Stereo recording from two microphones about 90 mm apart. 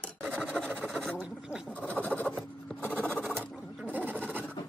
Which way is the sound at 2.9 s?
20° left (ahead or behind).